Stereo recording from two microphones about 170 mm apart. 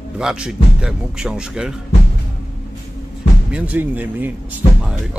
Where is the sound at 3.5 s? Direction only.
10° right (ahead or behind).